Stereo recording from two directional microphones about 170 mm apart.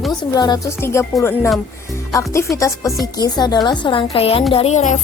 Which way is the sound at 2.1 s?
20° left (ahead or behind).